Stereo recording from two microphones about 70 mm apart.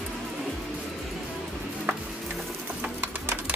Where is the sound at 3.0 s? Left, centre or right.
Right.